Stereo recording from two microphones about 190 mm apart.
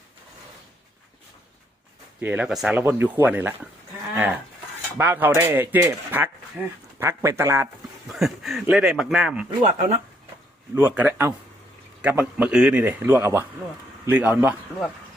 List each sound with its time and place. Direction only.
2.2 s speech: 10° right (ahead or behind)
4.9 s speech: 10° right (ahead or behind)
8.1 s speech: centre (ahead or behind)
9.6 s speech: 40° right (ahead or behind)
10.8 s speech: 10° right (ahead or behind)